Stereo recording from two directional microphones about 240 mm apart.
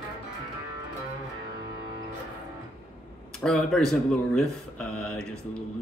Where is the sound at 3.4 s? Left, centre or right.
Centre.